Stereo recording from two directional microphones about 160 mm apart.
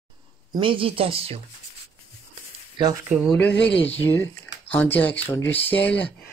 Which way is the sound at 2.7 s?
25° right (ahead or behind).